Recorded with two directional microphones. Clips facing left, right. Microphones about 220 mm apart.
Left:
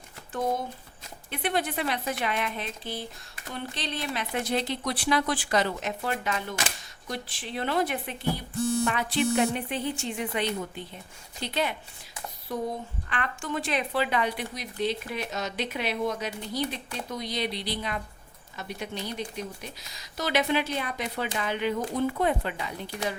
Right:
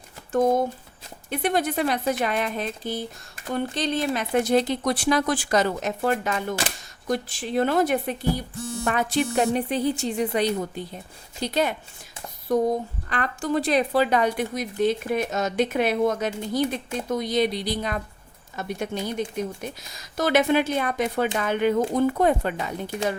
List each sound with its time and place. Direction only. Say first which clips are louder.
1.3 s a woman's voice: right 5 dB; 40° right (ahead or behind)